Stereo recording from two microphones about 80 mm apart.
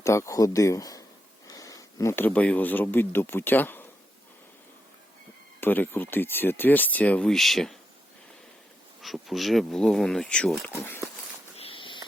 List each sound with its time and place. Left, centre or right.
0.0 s speech: left
1.5 s a sound: left
2.1 s speech: left
5.5 s speech: left
7.3 s speech: centre
9.0 s speech: centre
10.7 s speech: left
11.7 s a sound: left